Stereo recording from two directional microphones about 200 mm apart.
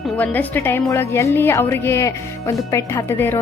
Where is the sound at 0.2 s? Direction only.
10° left (ahead or behind).